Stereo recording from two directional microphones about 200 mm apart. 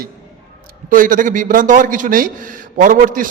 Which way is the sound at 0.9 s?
40° right (ahead or behind).